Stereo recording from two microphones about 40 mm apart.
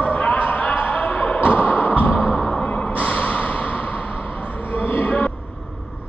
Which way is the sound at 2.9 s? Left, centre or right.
Left.